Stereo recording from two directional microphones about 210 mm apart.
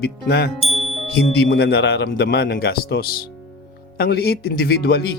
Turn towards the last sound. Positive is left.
turn(degrees=50)  # may be behind; listen again after turning